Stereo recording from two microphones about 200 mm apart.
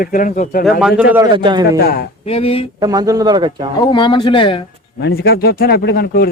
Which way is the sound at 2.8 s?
20° right (ahead or behind).